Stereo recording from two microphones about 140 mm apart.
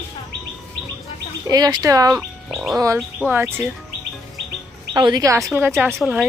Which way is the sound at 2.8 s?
20° right (ahead or behind).